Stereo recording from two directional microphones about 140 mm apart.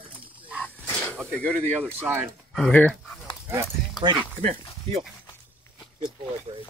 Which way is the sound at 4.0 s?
30° left (ahead or behind).